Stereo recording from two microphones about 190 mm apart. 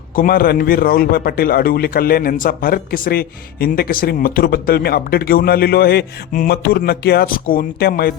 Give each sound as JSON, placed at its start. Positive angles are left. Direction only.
{"t": 0.2, "sound": "a man's voice", "side_deg": 50}